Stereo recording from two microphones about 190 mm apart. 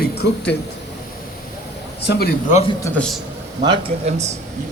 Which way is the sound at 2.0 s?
60° left (ahead or behind).